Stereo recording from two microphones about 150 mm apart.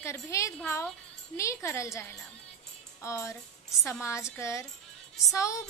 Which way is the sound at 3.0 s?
20° left (ahead or behind).